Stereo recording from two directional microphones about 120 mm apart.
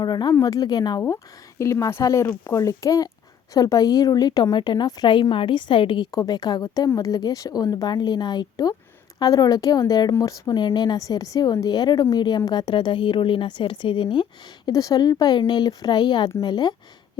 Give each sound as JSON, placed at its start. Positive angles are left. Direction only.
{"t": 0.0, "sound": "a woman's voice", "side_deg": 35}
{"t": 1.0, "sound": "a woman's voice", "side_deg": 25}
{"t": 6.1, "sound": "a woman's voice", "side_deg": 30}
{"t": 14.7, "sound": "a woman's voice", "side_deg": 30}